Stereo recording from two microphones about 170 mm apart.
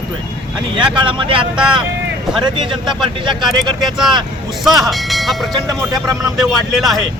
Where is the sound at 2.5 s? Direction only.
30° right (ahead or behind).